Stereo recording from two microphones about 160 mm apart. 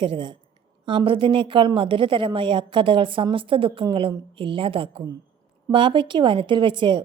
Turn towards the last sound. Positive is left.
turn(degrees=-30)  # may be behind; listen again after turning